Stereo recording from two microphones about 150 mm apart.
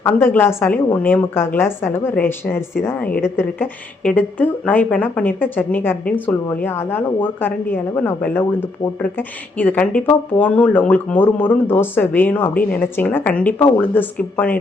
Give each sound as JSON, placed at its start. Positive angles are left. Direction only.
{"t": 0.0, "sound": "speech", "side_deg": 15}